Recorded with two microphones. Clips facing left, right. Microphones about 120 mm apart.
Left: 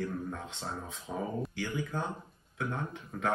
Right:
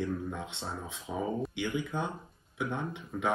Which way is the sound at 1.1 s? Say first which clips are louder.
Right 2 dB; centre (ahead or behind).